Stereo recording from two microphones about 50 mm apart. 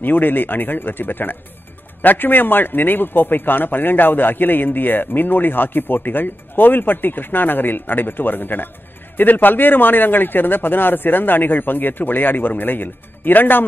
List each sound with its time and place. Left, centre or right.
0.0 s speech: left